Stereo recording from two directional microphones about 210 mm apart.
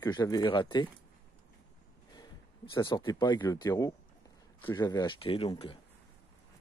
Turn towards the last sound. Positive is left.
turn(degrees=25)  # may be behind; listen again after turning